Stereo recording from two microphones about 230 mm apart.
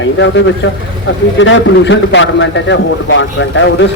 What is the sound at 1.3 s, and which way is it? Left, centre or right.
A man's voice, left.